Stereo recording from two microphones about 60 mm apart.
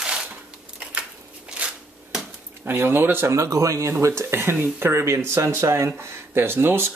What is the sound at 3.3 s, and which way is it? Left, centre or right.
Speech, right.